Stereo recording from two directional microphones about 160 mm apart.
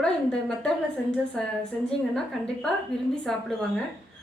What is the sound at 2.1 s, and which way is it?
Speech, 5° left (ahead or behind).